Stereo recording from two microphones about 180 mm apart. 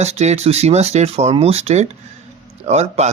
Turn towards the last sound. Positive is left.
turn(degrees=-35)  # may be behind; listen again after turning